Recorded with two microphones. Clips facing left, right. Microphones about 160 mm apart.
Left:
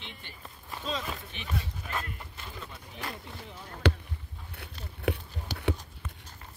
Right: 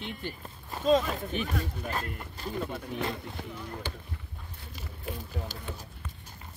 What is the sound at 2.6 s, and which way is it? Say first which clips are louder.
Speech: right 13 dB; 55° right (ahead or behind).